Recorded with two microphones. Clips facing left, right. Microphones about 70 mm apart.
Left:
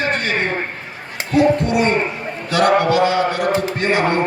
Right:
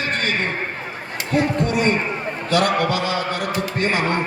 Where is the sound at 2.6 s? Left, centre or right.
Left.